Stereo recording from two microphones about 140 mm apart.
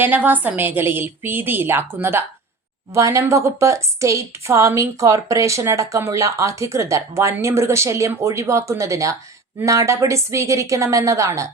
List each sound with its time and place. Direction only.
0.0 s a woman's voice: 15° right (ahead or behind)